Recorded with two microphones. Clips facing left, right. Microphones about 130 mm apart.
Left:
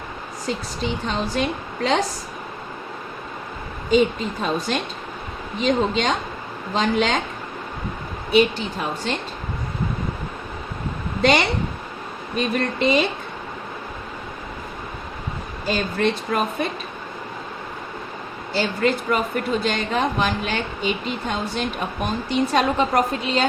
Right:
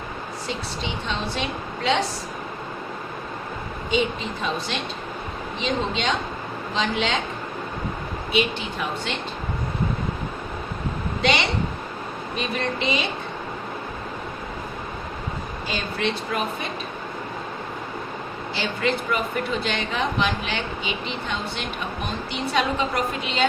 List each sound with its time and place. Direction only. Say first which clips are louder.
0.4 s speech: left 5 dB; 45° left (ahead or behind)
3.9 s speech: left 6 dB; 45° left (ahead or behind)
8.3 s speech: left 6 dB; 40° left (ahead or behind)
11.2 s a woman's voice: left 4 dB; 50° left (ahead or behind)
15.6 s speech: left 6 dB; 45° left (ahead or behind)
18.5 s a woman's voice: left 4 dB; 40° left (ahead or behind)